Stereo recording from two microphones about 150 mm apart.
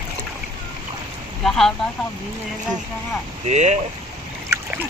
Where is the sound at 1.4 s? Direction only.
5° left (ahead or behind).